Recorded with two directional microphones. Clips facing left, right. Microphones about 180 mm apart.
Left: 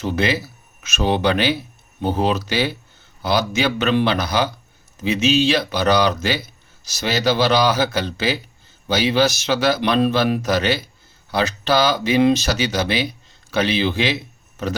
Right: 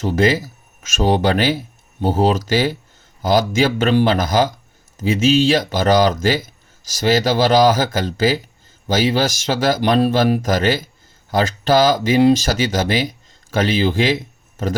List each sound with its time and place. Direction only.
0.0 s speech: 45° right (ahead or behind)